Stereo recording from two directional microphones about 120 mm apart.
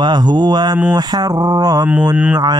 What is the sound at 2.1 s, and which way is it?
Speech, 10° right (ahead or behind).